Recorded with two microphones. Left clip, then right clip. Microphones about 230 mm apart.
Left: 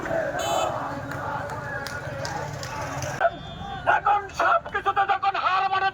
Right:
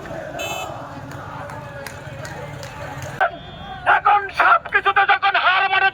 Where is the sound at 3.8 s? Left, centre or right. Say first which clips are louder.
Right 6 dB; right.